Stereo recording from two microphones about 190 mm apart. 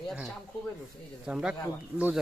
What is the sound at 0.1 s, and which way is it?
Speech, centre (ahead or behind).